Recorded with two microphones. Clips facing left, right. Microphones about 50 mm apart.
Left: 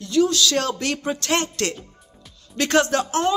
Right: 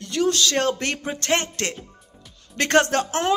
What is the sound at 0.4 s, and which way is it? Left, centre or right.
A woman's voice, right.